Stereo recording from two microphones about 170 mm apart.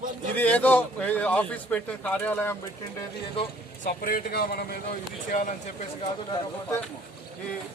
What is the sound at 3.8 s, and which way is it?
Speech, 55° left (ahead or behind).